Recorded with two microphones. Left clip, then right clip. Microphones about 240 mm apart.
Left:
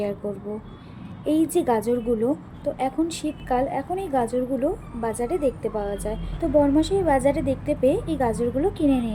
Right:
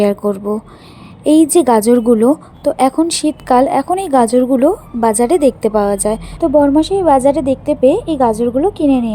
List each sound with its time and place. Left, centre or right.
0.0 s a woman's voice: right